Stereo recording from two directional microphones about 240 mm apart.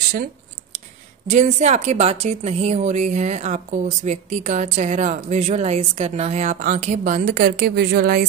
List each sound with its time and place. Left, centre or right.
0.7 s speech: right